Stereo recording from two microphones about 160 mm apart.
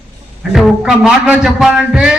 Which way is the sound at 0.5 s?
Centre (ahead or behind).